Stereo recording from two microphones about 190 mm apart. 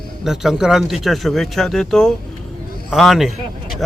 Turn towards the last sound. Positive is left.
turn(degrees=0)  # may be behind; listen again after turning